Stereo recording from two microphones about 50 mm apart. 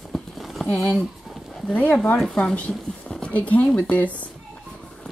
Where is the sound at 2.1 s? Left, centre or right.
Centre.